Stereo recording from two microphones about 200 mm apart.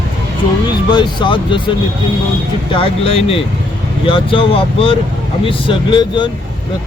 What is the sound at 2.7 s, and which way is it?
Speech, 25° left (ahead or behind).